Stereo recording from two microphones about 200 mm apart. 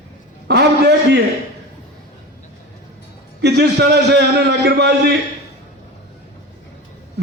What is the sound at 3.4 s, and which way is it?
A man's voice, 55° right (ahead or behind).